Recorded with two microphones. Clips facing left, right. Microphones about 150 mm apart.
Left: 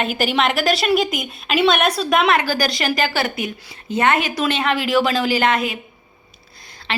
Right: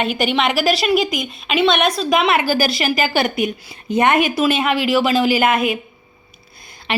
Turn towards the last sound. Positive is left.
turn(degrees=-15)  # may be behind; listen again after turning